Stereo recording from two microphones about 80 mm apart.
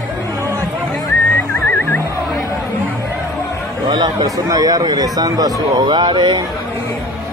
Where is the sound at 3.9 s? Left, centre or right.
Right.